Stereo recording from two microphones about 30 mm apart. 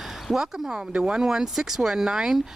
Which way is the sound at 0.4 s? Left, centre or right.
Centre.